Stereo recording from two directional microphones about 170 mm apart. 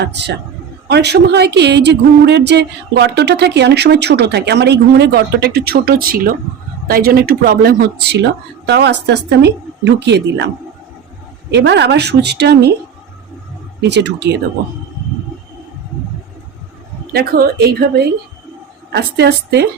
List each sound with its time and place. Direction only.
0.0 s a woman's voice: 85° right
11.5 s speech: 90° right
13.8 s a woman's voice: 90° right
17.1 s speech: 65° right (ahead or behind)
18.9 s speech: 80° right